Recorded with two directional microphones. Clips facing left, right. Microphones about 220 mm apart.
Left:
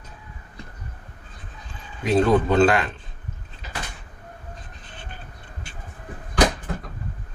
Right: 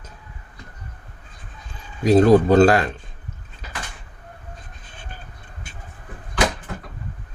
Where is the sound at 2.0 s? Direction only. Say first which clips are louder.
Right 5 dB; 40° right (ahead or behind).